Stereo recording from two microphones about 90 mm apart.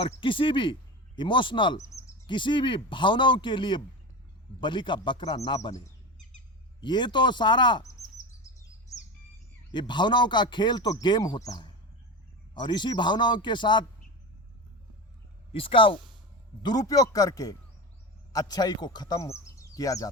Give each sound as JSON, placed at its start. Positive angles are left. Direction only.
{"t": 0.2, "sound": "speech", "side_deg": 70}
{"t": 6.8, "sound": "speech", "side_deg": 60}
{"t": 8.9, "sound": "bird", "side_deg": 40}
{"t": 9.7, "sound": "speech", "side_deg": 60}
{"t": 12.5, "sound": "speech", "side_deg": 60}
{"t": 15.5, "sound": "speech", "side_deg": 75}
{"t": 16.6, "sound": "speech", "side_deg": 45}
{"t": 19.2, "sound": "speech", "side_deg": 35}